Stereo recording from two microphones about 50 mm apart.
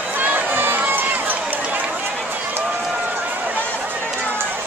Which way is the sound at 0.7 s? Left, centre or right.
Right.